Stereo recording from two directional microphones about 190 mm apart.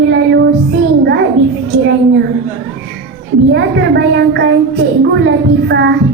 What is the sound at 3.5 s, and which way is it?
A child's voice, 65° right (ahead or behind).